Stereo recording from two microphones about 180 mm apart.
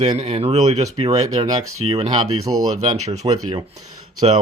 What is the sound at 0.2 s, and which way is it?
Speech, 35° right (ahead or behind).